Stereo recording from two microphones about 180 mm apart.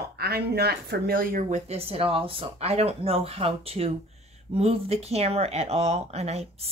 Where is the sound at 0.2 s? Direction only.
60° right (ahead or behind).